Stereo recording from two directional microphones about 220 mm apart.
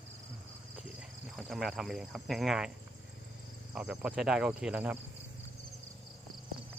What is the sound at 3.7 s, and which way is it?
Cricket, 5° right (ahead or behind).